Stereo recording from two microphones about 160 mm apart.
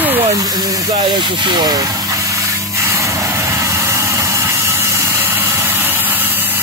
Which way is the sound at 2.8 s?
20° right (ahead or behind).